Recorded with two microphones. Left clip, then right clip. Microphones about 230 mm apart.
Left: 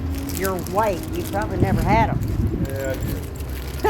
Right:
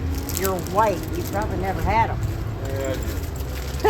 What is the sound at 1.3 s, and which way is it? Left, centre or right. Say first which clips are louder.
Speech: left 2 dB; left.